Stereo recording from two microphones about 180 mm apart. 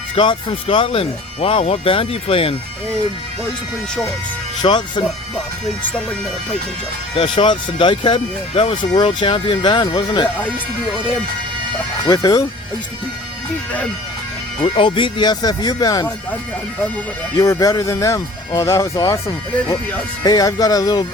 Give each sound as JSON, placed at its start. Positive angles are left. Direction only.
{"t": 0.2, "sound": "speech", "side_deg": 30}
{"t": 4.6, "sound": "speech", "side_deg": 25}
{"t": 7.2, "sound": "speech", "side_deg": 25}
{"t": 10.2, "sound": "speech", "side_deg": 10}
{"t": 12.0, "sound": "speech", "side_deg": 20}
{"t": 14.6, "sound": "speech", "side_deg": 30}
{"t": 17.3, "sound": "speech", "side_deg": 20}
{"t": 20.2, "sound": "speech", "side_deg": 20}